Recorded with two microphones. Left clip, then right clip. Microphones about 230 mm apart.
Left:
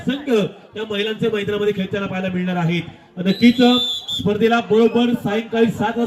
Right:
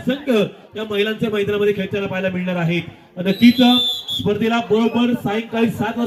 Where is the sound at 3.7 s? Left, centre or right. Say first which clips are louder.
Right 1 dB; centre.